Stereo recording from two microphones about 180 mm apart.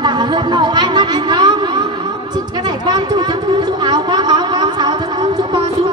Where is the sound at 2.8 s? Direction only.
20° right (ahead or behind).